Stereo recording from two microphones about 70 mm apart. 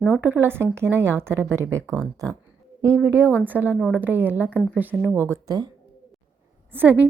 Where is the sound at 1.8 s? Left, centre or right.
Centre.